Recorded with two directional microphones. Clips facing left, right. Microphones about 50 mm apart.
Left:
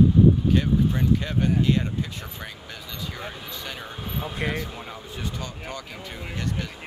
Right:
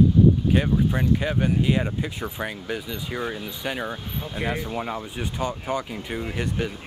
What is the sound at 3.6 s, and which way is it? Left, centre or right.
Speech, right.